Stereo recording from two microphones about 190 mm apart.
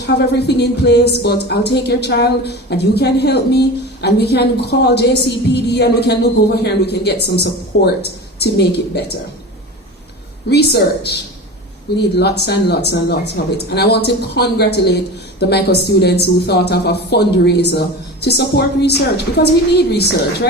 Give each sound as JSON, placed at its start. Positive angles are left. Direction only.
{"t": 0.0, "sound": "a woman's voice", "side_deg": 60}
{"t": 10.5, "sound": "a woman's voice", "side_deg": 60}